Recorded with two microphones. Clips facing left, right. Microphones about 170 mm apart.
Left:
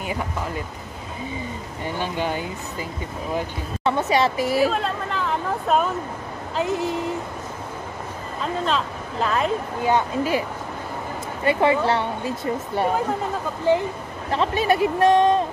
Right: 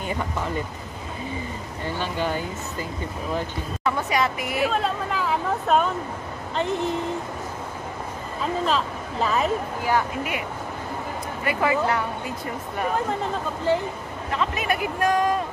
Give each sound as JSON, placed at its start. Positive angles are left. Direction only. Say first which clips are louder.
{"t": 2.0, "sound": "speech", "louder": "left 1 dB", "side_deg": 15}
{"t": 3.8, "sound": "speech", "louder": "left 4 dB", "side_deg": 25}
{"t": 4.7, "sound": "speech", "louder": "right 1 dB", "side_deg": -5}
{"t": 8.6, "sound": "speech", "louder": "even", "side_deg": 0}
{"t": 9.8, "sound": "speech", "louder": "left 4 dB", "side_deg": 25}
{"t": 11.4, "sound": "speech", "louder": "left 4 dB", "side_deg": 25}
{"t": 14.3, "sound": "speech", "louder": "left 5 dB", "side_deg": 30}